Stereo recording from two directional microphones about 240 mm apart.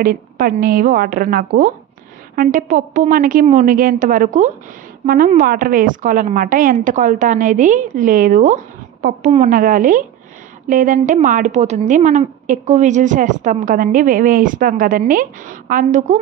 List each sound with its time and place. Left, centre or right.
0.0 s a woman's voice: right